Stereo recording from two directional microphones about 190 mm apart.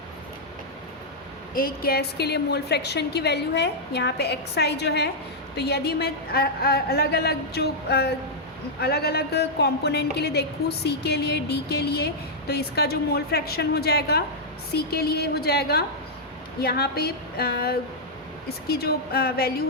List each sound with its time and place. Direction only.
1.5 s a woman's voice: 50° left (ahead or behind)